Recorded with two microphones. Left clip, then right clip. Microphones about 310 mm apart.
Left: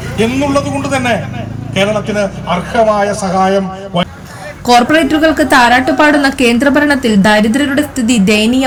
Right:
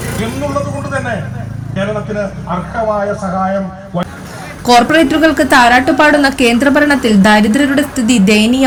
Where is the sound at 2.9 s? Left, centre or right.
Left.